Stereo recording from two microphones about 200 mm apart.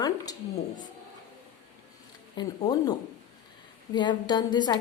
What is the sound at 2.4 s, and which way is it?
A woman's voice, 20° left (ahead or behind).